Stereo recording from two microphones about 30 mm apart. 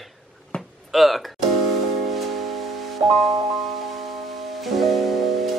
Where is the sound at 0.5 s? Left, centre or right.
Left.